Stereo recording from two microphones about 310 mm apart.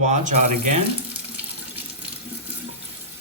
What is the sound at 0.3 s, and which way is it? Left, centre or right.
Speech, right.